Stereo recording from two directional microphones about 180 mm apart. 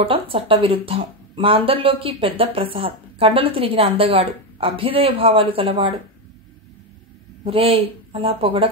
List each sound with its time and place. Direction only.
0.0 s a woman's voice: 30° right (ahead or behind)
7.4 s a woman's voice: 35° right (ahead or behind)